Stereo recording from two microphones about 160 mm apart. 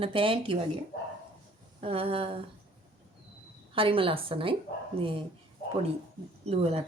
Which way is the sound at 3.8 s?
35° right (ahead or behind).